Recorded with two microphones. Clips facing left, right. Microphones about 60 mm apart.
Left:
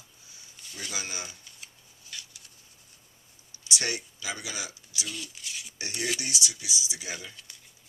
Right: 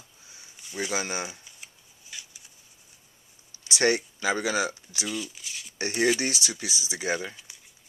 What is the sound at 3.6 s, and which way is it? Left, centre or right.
Speech, right.